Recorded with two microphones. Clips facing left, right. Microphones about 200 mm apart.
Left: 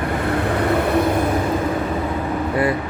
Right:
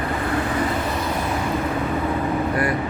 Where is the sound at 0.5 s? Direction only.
60° left (ahead or behind).